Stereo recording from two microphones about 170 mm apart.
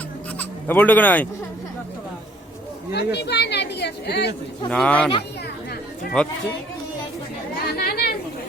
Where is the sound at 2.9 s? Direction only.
75° left (ahead or behind).